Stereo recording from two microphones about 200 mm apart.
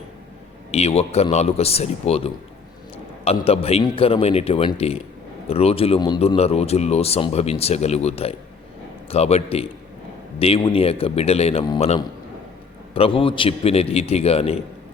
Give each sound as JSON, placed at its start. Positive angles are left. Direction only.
{"t": 0.7, "sound": "a man's voice", "side_deg": 30}